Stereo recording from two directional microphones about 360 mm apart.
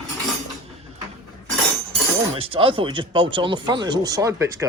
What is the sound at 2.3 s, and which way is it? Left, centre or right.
Speech, centre.